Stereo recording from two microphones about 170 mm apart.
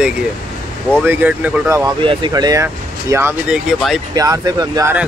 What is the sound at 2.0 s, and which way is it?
Speech, 30° right (ahead or behind).